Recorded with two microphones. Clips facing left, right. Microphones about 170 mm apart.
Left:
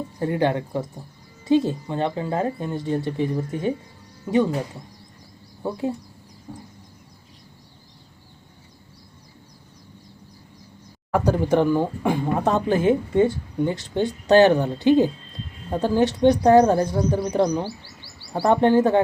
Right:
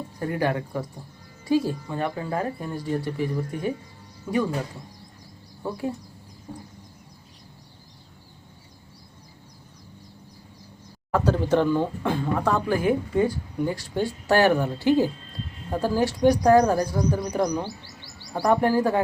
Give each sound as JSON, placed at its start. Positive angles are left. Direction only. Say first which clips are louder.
{"t": 0.2, "sound": "speech", "louder": "left 3 dB", "side_deg": 25}
{"t": 11.3, "sound": "speech", "louder": "left 2 dB", "side_deg": 15}